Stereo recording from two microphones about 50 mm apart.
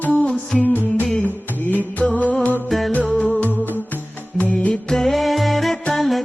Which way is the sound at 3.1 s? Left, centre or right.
Left.